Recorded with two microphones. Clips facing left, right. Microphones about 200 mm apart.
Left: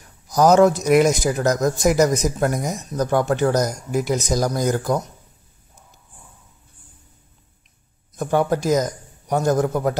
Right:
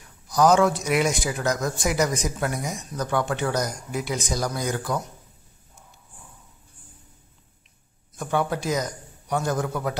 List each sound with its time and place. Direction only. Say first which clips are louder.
0.3 s a man's voice: left 5 dB; 40° left (ahead or behind)
8.2 s a man's voice: left 6 dB; 40° left (ahead or behind)